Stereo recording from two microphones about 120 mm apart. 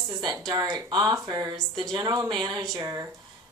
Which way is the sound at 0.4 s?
35° right (ahead or behind).